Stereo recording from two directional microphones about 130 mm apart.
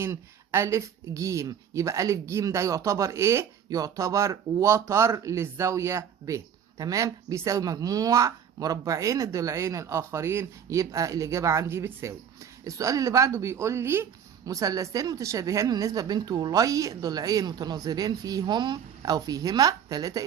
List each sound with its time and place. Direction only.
0.0 s speech: 20° right (ahead or behind)